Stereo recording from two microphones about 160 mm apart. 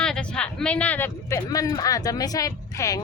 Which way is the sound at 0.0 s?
5° left (ahead or behind).